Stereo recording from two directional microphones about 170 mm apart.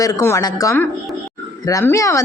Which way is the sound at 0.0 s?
15° left (ahead or behind).